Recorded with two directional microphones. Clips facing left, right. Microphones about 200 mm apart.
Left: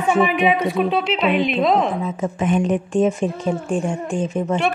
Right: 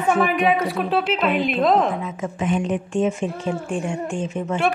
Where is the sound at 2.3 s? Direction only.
50° left (ahead or behind).